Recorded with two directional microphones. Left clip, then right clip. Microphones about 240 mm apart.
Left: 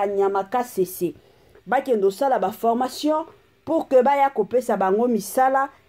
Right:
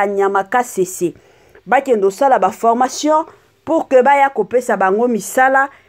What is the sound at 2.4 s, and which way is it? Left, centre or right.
Speech, centre.